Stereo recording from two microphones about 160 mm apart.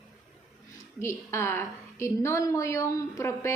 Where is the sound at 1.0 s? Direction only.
15° left (ahead or behind).